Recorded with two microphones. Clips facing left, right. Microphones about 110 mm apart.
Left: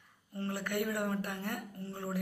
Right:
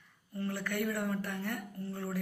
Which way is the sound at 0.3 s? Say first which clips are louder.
Even; 25° left (ahead or behind).